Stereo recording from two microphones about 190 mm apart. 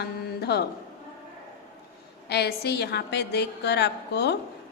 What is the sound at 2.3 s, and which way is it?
A woman's voice, 60° left (ahead or behind).